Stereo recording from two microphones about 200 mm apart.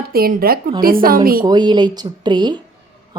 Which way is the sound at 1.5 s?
20° right (ahead or behind).